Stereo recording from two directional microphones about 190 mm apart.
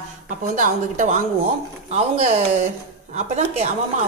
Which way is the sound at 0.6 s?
40° right (ahead or behind).